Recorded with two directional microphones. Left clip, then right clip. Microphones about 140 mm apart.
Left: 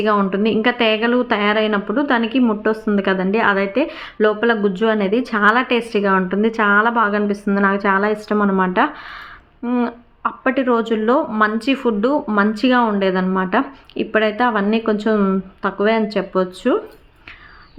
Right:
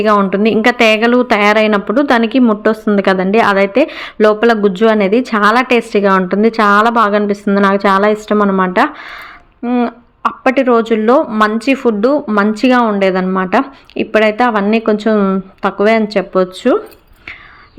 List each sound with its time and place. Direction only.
0.0 s a woman's voice: 30° right (ahead or behind)